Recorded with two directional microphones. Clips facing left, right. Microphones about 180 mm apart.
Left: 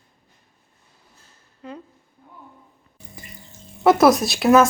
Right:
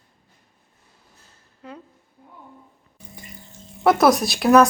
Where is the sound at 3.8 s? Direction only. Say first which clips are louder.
Left 2 dB; centre (ahead or behind).